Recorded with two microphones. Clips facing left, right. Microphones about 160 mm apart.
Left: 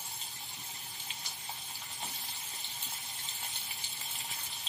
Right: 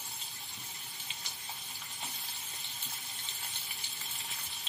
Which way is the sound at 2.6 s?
Centre (ahead or behind).